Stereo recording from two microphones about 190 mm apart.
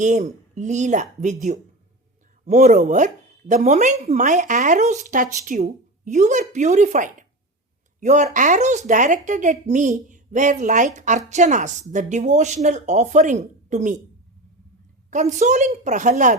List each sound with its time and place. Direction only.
0.0 s speech: 40° right (ahead or behind)
15.1 s speech: 40° right (ahead or behind)